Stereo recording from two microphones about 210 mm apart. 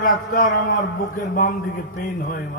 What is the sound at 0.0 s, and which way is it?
A man's voice, 40° left (ahead or behind).